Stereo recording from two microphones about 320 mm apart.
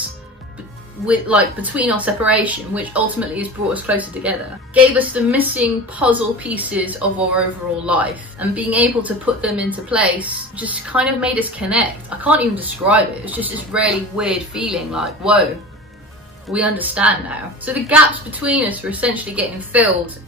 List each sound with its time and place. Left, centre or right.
1.0 s speech: centre
16.5 s speech: centre